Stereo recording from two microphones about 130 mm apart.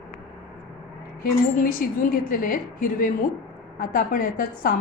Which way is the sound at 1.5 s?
90° left.